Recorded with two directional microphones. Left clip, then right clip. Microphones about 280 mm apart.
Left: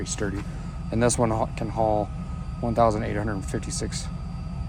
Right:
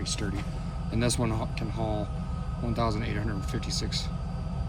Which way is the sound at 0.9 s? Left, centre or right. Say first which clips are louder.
Left 7 dB; centre.